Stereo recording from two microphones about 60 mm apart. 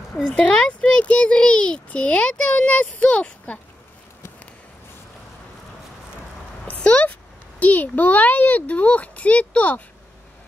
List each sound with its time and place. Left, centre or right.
0.3 s a child's voice: centre
6.7 s a child's voice: left